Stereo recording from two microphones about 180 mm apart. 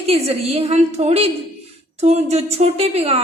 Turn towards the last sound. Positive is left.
turn(degrees=-35)  # may be behind; listen again after turning